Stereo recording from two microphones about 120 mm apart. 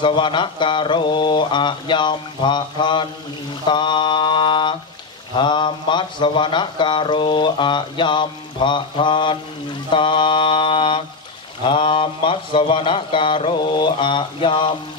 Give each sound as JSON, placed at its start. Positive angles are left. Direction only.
{"t": 0.0, "sound": "speech", "side_deg": 40}